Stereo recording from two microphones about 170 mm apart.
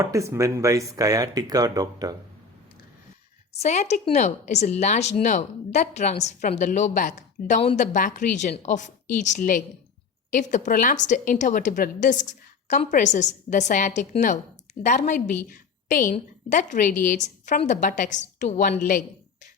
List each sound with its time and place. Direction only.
0.0 s speech: 20° right (ahead or behind)
3.5 s a woman's voice: 40° left (ahead or behind)